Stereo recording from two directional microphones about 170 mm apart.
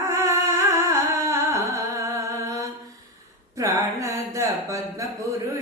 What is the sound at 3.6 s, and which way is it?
Speech, 20° right (ahead or behind).